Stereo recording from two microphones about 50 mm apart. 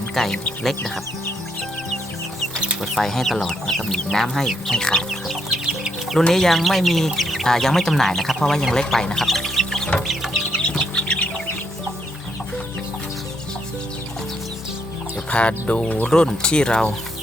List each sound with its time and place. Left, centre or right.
0.1 s speech: centre
2.8 s speech: centre
5.5 s chicken: centre
6.1 s speech: centre
9.2 s music: centre
10.5 s bird: centre
15.3 s chicken: left
16.0 s speech: centre